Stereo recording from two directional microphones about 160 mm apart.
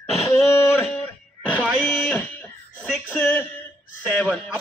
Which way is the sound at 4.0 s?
5° right (ahead or behind).